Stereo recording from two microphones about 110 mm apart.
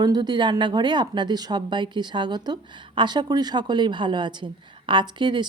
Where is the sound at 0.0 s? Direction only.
40° right (ahead or behind).